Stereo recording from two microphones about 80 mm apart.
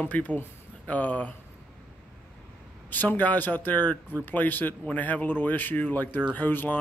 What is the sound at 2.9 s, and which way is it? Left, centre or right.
Speech, left.